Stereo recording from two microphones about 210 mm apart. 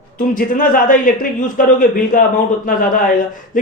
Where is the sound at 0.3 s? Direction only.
40° left (ahead or behind).